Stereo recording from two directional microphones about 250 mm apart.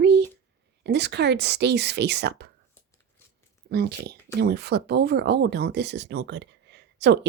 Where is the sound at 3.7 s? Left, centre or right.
Right.